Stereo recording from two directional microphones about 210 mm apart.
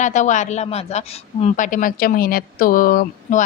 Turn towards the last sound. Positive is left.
turn(degrees=40)  # may be behind; listen again after turning